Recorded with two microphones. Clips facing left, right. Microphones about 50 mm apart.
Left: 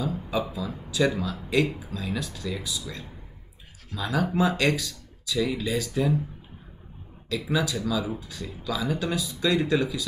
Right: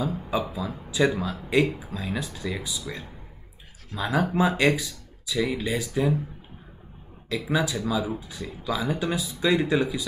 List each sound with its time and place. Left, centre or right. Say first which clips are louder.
0.0 s a sound: right 2 dB; centre
0.5 s speech: right 1 dB; right
3.9 s speech: right 2 dB; right
7.2 s speech: right 1 dB; right